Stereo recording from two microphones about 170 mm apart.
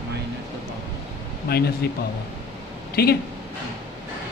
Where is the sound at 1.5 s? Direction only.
70° left (ahead or behind).